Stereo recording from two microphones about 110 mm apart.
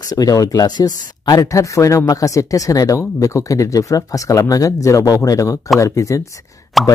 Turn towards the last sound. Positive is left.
turn(degrees=0)  # may be behind; listen again after turning